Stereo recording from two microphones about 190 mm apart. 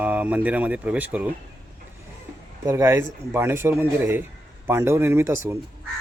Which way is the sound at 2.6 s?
15° right (ahead or behind).